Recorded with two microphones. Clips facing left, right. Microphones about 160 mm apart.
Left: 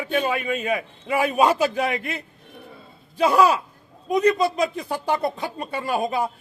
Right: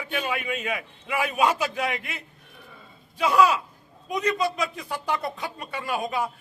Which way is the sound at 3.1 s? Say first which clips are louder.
Left 3 dB; 35° left (ahead or behind).